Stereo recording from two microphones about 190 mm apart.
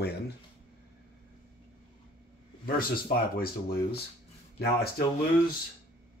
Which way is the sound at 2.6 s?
50° left (ahead or behind).